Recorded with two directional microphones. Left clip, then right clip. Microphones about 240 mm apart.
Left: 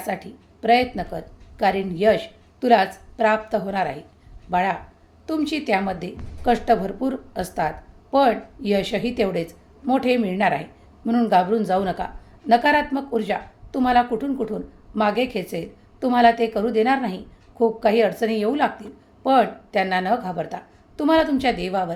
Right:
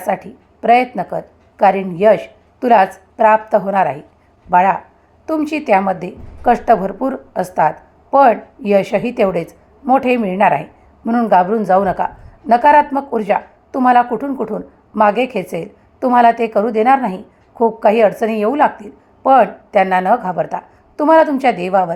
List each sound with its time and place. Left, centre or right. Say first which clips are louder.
0.0 s a woman's voice: right 9 dB; centre
20.4 s a woman's voice: right 10 dB; centre
20.9 s speech: right 8 dB; centre